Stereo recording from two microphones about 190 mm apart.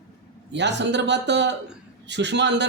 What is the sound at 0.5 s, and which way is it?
A man's voice, 65° right (ahead or behind).